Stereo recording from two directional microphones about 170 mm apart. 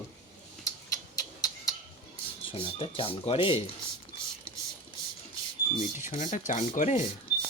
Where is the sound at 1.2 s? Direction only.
20° left (ahead or behind).